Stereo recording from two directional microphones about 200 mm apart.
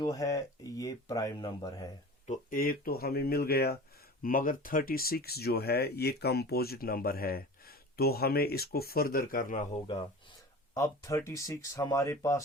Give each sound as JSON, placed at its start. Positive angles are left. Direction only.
{"t": 0.0, "sound": "speech", "side_deg": 15}
{"t": 2.2, "sound": "speech", "side_deg": 40}
{"t": 10.8, "sound": "speech", "side_deg": 15}